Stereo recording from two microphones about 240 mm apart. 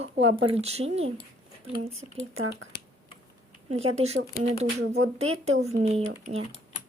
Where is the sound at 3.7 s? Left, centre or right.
Right.